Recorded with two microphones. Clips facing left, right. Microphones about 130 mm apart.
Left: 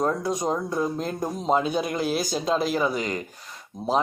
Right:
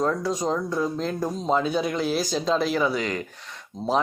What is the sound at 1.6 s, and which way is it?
Speech, 50° left (ahead or behind).